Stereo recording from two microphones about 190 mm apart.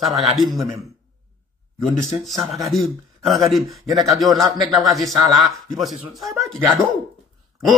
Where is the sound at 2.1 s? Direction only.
Centre (ahead or behind).